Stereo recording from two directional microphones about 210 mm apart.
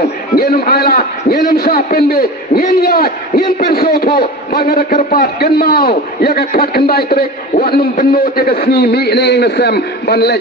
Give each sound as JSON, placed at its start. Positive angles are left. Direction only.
{"t": 0.4, "sound": "a man's voice", "side_deg": 45}